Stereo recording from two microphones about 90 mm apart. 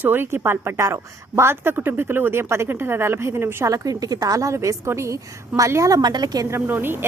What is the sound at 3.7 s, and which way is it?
A woman's voice, 40° right (ahead or behind).